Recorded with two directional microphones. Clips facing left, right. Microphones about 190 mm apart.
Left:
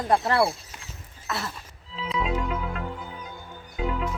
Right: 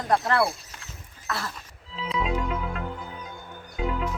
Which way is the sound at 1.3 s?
25° left (ahead or behind).